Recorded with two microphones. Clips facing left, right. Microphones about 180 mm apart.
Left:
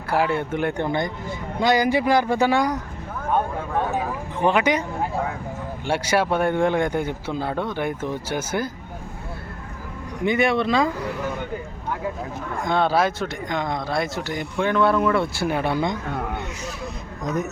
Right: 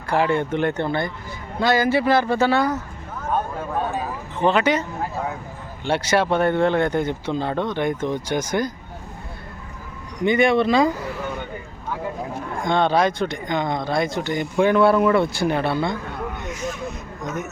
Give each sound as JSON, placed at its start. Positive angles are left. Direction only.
{"t": 0.1, "sound": "speech", "side_deg": 5}
{"t": 3.9, "sound": "a sound", "side_deg": 10}
{"t": 5.8, "sound": "speech", "side_deg": 10}
{"t": 10.2, "sound": "speech", "side_deg": 5}
{"t": 12.6, "sound": "speech", "side_deg": 5}
{"t": 14.6, "sound": "speech", "side_deg": -10}
{"t": 17.2, "sound": "a man's voice", "side_deg": 35}